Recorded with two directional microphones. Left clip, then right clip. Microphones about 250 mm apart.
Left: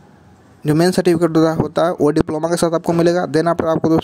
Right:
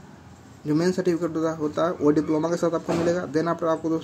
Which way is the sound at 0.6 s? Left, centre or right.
Left.